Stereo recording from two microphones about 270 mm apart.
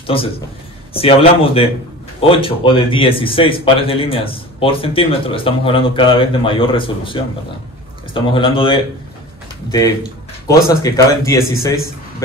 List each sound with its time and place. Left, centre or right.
0.0 s a man's voice: centre
10.4 s speech: centre